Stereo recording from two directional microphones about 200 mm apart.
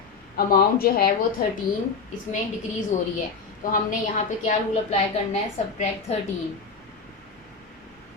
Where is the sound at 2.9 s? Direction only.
40° left (ahead or behind).